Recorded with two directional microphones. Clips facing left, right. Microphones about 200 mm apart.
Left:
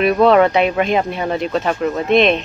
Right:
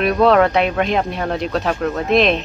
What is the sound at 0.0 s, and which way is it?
Speech, centre (ahead or behind).